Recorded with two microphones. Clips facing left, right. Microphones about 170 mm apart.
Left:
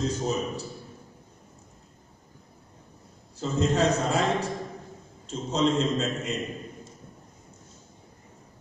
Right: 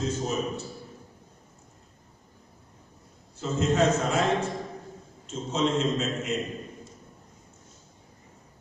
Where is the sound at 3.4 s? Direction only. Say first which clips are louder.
Even; 35° left (ahead or behind).